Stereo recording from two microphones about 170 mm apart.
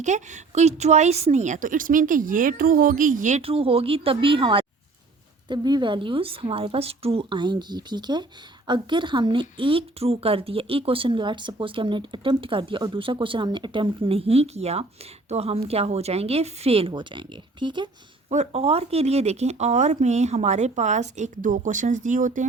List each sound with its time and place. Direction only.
0.0 s speech: 45° right (ahead or behind); by 17.8 s 25° right (ahead or behind)
18.3 s speech: 40° right (ahead or behind)